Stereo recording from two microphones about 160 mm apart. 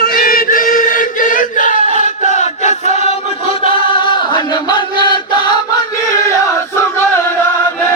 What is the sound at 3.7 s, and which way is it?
Chant, 30° left (ahead or behind).